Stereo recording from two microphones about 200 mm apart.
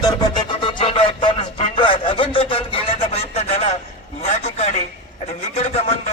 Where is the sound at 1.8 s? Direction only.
25° left (ahead or behind).